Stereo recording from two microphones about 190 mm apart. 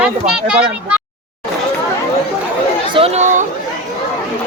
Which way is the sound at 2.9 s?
30° right (ahead or behind).